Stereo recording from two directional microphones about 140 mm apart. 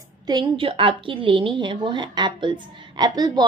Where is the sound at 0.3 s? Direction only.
30° right (ahead or behind).